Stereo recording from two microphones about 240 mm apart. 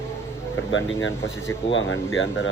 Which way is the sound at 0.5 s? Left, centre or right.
Left.